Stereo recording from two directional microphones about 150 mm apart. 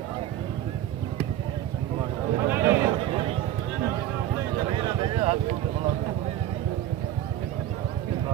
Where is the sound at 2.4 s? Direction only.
15° right (ahead or behind).